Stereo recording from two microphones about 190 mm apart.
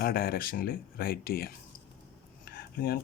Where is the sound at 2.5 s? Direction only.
55° left (ahead or behind).